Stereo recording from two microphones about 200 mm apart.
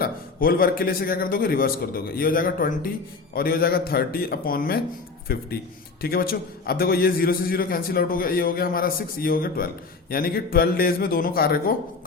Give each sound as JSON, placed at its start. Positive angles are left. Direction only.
{"t": 0.0, "sound": "a man's voice", "side_deg": 45}